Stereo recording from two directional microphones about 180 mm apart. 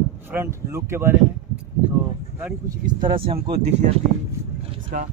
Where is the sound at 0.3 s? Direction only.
15° right (ahead or behind).